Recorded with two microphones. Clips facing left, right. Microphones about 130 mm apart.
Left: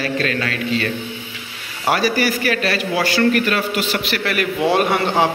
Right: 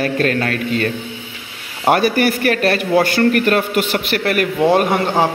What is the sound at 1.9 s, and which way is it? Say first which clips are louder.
A man's voice: right 4 dB; 55° right (ahead or behind).